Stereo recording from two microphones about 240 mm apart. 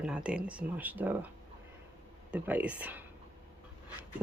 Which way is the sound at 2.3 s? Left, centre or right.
Centre.